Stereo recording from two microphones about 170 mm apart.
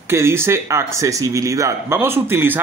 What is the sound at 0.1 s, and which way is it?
Speech, 15° right (ahead or behind).